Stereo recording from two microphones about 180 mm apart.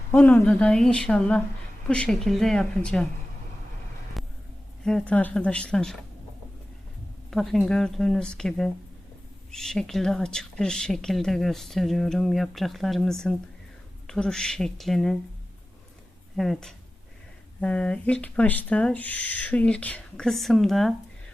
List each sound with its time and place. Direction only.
0.1 s a woman's voice: 10° left (ahead or behind)
4.2 s a sound: centre (ahead or behind)
4.9 s a woman's voice: 5° left (ahead or behind)
7.3 s a woman's voice: centre (ahead or behind)
16.4 s a woman's voice: centre (ahead or behind)